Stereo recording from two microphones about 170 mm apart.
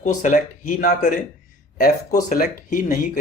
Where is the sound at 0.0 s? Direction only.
50° left (ahead or behind).